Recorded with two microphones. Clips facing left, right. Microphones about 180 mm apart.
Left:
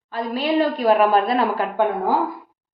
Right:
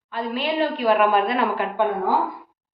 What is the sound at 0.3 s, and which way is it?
A woman's voice, 40° left (ahead or behind).